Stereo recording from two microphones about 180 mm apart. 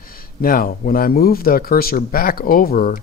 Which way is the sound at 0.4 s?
55° left (ahead or behind).